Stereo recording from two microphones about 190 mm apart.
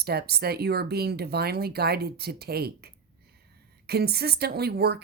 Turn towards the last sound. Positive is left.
turn(degrees=-55)  # may be behind; listen again after turning